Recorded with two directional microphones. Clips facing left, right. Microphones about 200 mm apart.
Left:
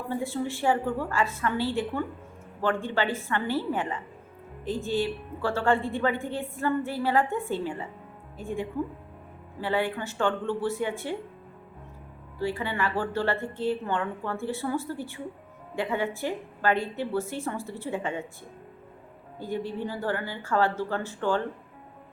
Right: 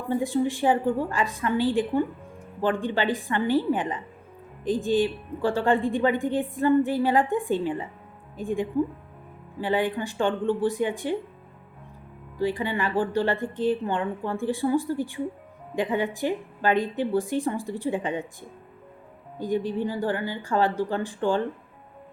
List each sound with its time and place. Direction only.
0.1 s a woman's voice: 15° right (ahead or behind)
12.4 s a woman's voice: 15° right (ahead or behind)